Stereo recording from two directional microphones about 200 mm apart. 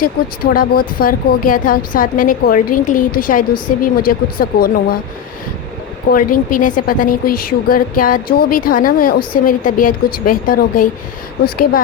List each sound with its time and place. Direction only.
0.5 s a woman's voice: 45° left (ahead or behind)
6.1 s a woman's voice: 45° left (ahead or behind)